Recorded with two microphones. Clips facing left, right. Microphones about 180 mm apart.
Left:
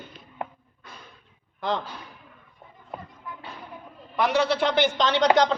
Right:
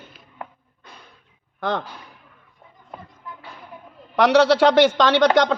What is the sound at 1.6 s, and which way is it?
Speech, 60° right (ahead or behind).